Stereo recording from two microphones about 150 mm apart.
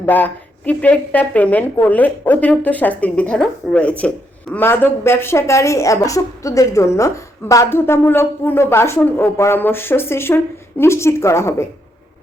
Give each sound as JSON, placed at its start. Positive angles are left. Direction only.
{"t": 0.0, "sound": "speech", "side_deg": 10}